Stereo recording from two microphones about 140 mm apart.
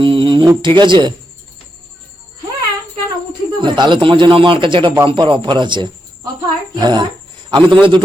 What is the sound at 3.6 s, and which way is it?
A man's voice, 35° right (ahead or behind).